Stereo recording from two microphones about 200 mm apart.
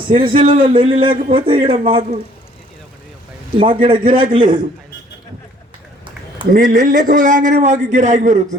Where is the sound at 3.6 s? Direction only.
25° right (ahead or behind).